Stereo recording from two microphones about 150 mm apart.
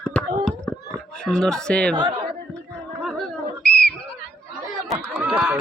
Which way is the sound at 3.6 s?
90° left.